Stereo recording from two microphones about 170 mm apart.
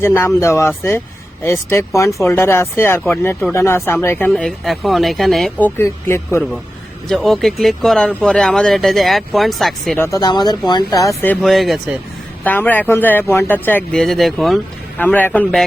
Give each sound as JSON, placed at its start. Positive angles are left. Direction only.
{"t": 0.0, "sound": "speech", "side_deg": 15}
{"t": 4.3, "sound": "speech", "side_deg": 0}
{"t": 7.1, "sound": "speech", "side_deg": 0}
{"t": 10.0, "sound": "speech", "side_deg": 20}
{"t": 11.4, "sound": "speech", "side_deg": 0}
{"t": 12.5, "sound": "speech", "side_deg": 10}